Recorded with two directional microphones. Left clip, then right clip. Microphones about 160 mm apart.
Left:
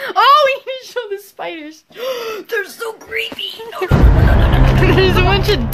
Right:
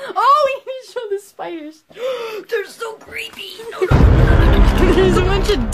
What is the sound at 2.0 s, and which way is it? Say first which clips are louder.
Gasp: left 1 dB; 55° left (ahead or behind).